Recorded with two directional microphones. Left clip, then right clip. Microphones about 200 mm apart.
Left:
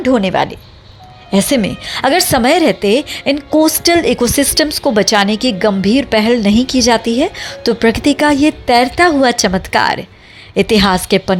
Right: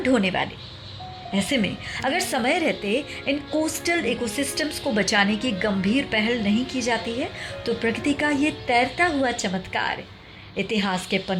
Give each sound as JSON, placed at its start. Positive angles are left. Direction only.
{"t": 0.0, "sound": "a woman's voice", "side_deg": 30}